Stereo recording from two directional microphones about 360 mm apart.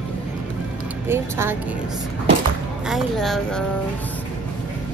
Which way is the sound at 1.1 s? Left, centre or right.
Centre.